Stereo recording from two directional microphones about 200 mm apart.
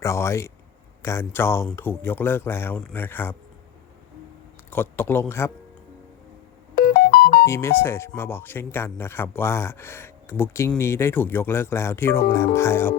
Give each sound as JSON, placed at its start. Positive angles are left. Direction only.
{"t": 0.0, "sound": "speech", "side_deg": 15}
{"t": 4.7, "sound": "speech", "side_deg": 10}
{"t": 6.7, "sound": "music", "side_deg": 50}
{"t": 7.4, "sound": "speech", "side_deg": 15}